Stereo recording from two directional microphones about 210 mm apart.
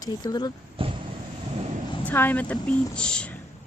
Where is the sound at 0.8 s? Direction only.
25° right (ahead or behind).